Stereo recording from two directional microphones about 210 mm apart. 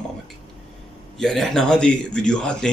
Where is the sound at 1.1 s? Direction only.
Centre (ahead or behind).